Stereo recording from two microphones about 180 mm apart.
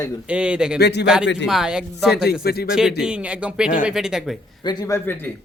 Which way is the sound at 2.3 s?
60° left (ahead or behind).